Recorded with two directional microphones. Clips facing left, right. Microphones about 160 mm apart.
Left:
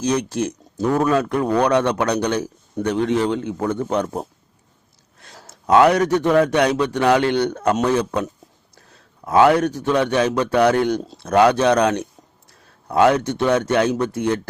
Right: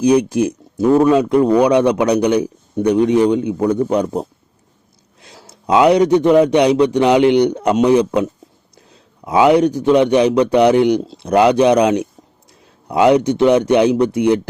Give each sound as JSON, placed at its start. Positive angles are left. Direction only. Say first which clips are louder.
{"t": 0.0, "sound": "speech", "louder": "right 8 dB", "side_deg": -10}
{"t": 5.2, "sound": "speech", "louder": "right 2 dB", "side_deg": -10}